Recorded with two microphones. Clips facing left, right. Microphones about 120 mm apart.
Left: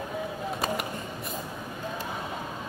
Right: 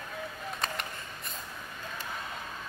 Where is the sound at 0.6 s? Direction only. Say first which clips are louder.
Left 6 dB; 5° left (ahead or behind).